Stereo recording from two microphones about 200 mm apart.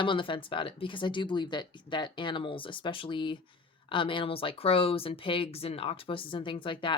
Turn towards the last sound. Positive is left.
turn(degrees=25)  # may be behind; listen again after turning